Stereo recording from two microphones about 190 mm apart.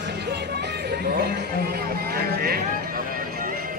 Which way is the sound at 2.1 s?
55° right (ahead or behind).